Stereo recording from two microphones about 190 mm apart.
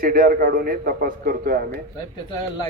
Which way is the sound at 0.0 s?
50° right (ahead or behind).